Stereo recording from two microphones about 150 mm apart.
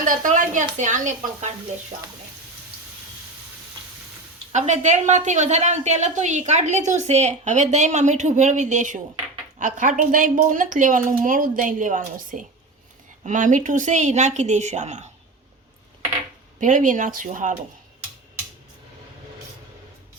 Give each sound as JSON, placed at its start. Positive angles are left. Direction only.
{"t": 0.0, "sound": "speech", "side_deg": -60}
{"t": 4.5, "sound": "a woman's voice", "side_deg": -50}
{"t": 16.6, "sound": "a woman's voice", "side_deg": -60}